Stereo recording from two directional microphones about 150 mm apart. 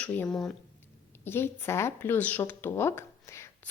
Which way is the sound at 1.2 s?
15° left (ahead or behind).